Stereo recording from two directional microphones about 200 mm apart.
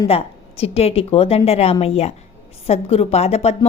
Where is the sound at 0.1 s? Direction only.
30° left (ahead or behind).